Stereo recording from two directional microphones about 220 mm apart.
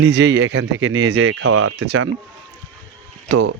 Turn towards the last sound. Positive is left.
turn(degrees=-55)  # may be behind; listen again after turning